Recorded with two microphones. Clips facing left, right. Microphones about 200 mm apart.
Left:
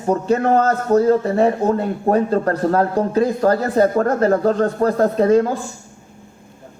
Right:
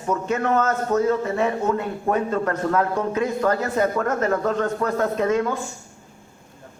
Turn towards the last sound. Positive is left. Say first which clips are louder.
# left 7 dB
turn(degrees=35)  # may be behind; listen again after turning